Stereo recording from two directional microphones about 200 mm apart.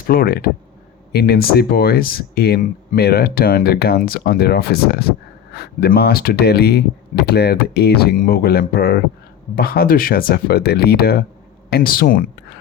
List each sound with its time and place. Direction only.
0.1 s speech: 50° left (ahead or behind)